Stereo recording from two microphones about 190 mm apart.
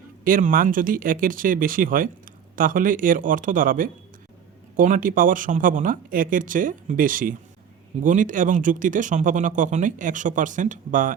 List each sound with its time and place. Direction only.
0.3 s speech: 45° right (ahead or behind)